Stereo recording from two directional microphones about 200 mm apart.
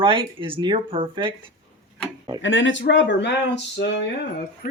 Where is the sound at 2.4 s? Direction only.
70° left (ahead or behind).